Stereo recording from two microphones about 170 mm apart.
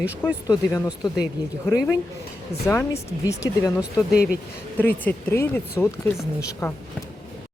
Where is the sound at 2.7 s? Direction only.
15° left (ahead or behind).